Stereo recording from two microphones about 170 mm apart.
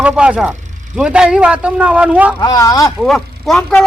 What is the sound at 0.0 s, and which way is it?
Speech, 5° right (ahead or behind).